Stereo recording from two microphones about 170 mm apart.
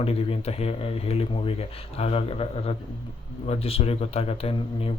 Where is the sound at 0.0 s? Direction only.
35° left (ahead or behind).